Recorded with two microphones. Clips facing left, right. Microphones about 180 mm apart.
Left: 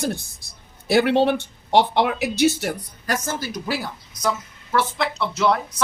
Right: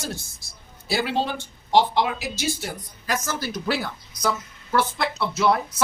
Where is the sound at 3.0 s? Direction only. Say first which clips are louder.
Left 2 dB; 45° left (ahead or behind).